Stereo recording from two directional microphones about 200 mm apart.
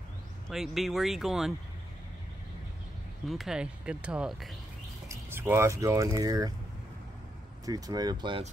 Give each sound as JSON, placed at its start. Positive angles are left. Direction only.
{"t": 0.5, "sound": "speech", "side_deg": 0}
{"t": 3.3, "sound": "speech", "side_deg": 0}
{"t": 5.0, "sound": "speech", "side_deg": -10}
{"t": 7.6, "sound": "speech", "side_deg": -20}